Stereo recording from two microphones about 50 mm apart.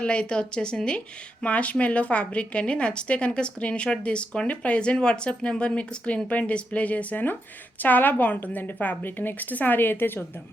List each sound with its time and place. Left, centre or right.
0.0 s a woman's voice: left